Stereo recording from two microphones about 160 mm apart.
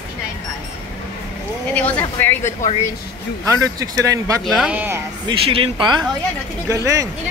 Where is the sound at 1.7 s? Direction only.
10° left (ahead or behind).